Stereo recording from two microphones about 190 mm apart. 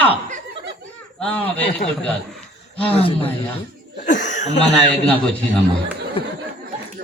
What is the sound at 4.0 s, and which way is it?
Speech, 40° left (ahead or behind).